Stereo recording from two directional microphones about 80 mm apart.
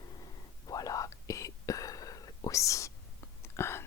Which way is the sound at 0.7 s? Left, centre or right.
Left.